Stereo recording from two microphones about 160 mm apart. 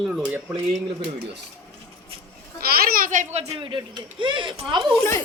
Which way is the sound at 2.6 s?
65° right (ahead or behind).